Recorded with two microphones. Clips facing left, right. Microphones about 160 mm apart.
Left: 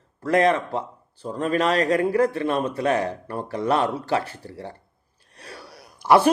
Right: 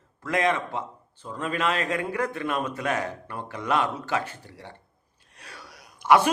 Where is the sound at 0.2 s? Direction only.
35° left (ahead or behind).